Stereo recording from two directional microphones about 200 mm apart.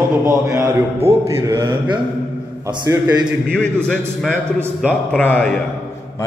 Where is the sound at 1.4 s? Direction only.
25° right (ahead or behind).